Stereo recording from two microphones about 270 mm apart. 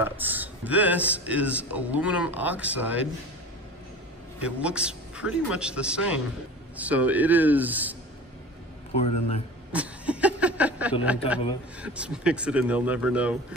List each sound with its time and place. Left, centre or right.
0.0 s a man's voice: centre
4.4 s a man's voice: centre
8.9 s a man's voice: left
9.7 s a man's voice: centre